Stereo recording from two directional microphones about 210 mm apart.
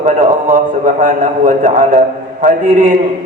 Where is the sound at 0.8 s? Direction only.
35° right (ahead or behind).